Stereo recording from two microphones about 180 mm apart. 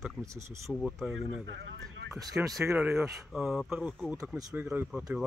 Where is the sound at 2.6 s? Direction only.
5° right (ahead or behind).